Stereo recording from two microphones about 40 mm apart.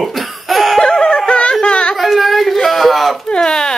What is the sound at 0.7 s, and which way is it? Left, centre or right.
Music, centre.